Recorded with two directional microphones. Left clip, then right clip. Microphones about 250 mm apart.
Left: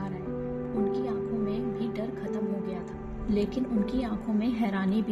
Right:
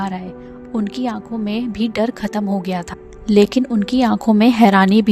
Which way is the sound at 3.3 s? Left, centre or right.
Right.